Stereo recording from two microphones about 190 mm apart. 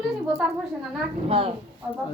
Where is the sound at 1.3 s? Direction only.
30° right (ahead or behind).